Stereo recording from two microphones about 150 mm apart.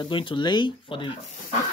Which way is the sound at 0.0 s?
35° left (ahead or behind).